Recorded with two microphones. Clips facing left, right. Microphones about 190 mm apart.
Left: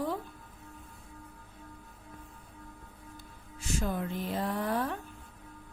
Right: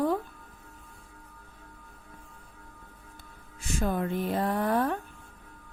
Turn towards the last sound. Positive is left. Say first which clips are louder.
# right 5 dB
turn(degrees=-60)  # may be behind; listen again after turning